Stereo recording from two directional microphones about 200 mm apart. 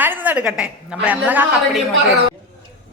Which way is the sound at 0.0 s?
10° right (ahead or behind).